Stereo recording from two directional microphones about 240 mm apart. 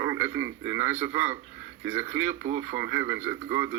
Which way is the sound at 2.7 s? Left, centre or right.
Centre.